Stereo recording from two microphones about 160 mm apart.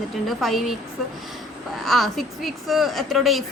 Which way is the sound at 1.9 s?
Centre (ahead or behind).